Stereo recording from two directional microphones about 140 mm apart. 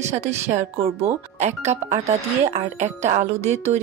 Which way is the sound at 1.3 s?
55° right (ahead or behind).